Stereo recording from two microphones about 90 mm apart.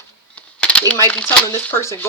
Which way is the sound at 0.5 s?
15° left (ahead or behind).